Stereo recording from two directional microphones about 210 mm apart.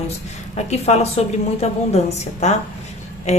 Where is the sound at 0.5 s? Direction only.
30° left (ahead or behind).